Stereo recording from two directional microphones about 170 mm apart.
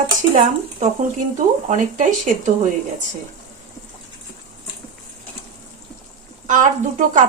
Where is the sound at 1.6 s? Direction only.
45° right (ahead or behind).